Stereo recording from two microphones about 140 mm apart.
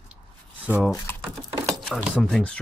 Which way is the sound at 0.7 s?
5° right (ahead or behind).